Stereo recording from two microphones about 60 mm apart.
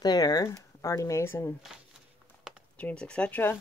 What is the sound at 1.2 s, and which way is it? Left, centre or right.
Speech, left.